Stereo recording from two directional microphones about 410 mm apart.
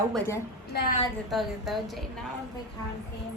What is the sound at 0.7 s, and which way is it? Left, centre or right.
Speech, left.